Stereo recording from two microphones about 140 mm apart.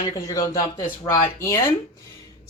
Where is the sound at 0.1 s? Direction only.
30° left (ahead or behind).